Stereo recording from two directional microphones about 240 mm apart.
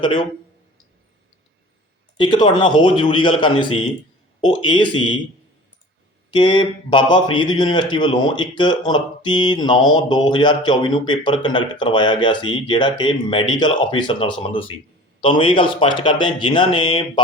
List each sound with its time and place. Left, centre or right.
2.1 s speech: centre
6.3 s speech: centre